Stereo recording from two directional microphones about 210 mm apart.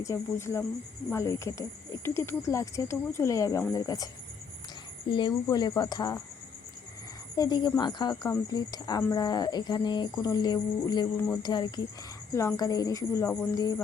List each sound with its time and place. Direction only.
0.0 s speech: 15° left (ahead or behind)
5.1 s speech: 20° left (ahead or behind)
7.3 s speech: 20° left (ahead or behind)